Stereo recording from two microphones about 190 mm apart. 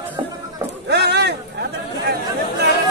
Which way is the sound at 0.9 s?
60° right (ahead or behind).